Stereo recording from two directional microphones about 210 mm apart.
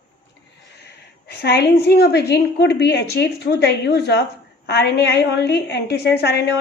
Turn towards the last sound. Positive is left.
turn(degrees=50)  # may be behind; listen again after turning